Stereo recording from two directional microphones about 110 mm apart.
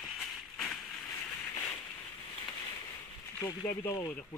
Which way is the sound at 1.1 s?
25° left (ahead or behind).